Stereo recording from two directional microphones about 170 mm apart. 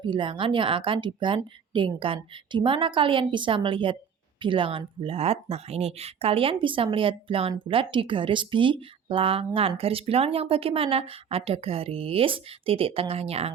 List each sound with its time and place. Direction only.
0.0 s speech: 30° right (ahead or behind)